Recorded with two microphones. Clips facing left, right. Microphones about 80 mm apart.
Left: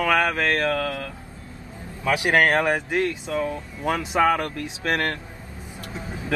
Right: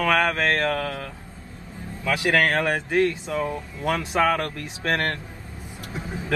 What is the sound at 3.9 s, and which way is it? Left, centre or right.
Speech, centre.